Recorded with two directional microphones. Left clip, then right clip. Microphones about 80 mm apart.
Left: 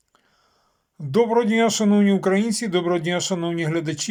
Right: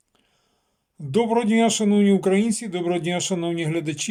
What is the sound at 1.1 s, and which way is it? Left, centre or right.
Speech, right.